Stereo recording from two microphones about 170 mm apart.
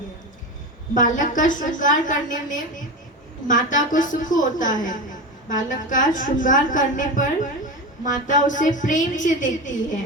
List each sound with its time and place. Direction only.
0.9 s a woman's voice: 50° left (ahead or behind)